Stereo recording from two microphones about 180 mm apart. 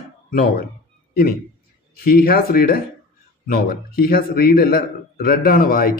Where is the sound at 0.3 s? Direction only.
55° left (ahead or behind).